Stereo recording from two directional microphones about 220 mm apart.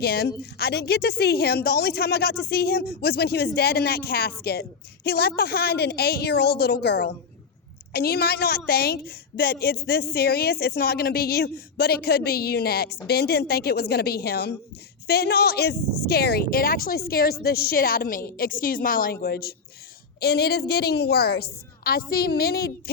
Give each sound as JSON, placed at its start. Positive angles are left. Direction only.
{"t": 0.0, "sound": "a woman's voice", "side_deg": 45}